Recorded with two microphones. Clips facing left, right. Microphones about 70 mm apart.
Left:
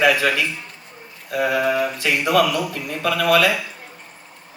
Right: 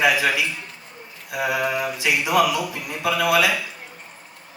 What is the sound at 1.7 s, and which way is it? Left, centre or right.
Speech, centre.